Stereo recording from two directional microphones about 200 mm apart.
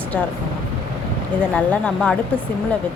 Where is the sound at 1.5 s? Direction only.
5° left (ahead or behind).